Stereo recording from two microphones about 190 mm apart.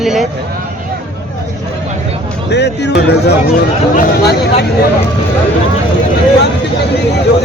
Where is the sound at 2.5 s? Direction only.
65° left (ahead or behind).